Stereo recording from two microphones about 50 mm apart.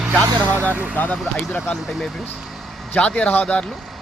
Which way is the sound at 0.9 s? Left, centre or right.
Left.